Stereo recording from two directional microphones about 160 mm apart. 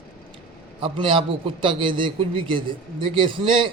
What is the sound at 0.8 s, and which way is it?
A man's voice, 30° right (ahead or behind).